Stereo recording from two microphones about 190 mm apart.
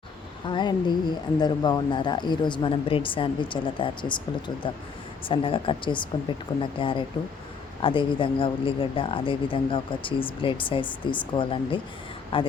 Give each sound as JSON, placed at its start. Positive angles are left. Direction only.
{"t": 0.4, "sound": "speech", "side_deg": 25}